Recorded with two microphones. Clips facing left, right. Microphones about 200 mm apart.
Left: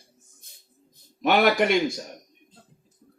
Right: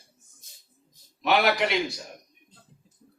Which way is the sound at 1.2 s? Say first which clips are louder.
Left 3 dB; 45° left (ahead or behind).